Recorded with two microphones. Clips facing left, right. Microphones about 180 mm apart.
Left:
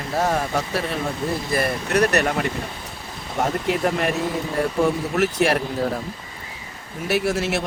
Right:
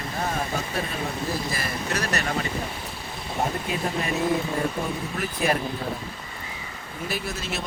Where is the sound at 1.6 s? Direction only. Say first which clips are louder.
Left 9 dB; 60° left (ahead or behind).